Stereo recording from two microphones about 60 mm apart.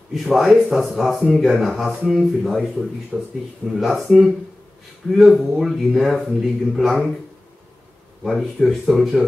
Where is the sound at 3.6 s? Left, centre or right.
Centre.